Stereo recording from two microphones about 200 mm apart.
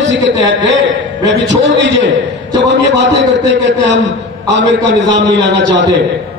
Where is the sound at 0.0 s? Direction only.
65° right (ahead or behind).